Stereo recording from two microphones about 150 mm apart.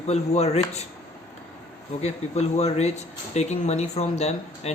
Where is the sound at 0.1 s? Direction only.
45° left (ahead or behind).